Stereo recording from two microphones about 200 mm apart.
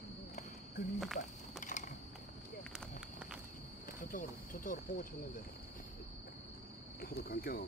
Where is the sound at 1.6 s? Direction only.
40° left (ahead or behind).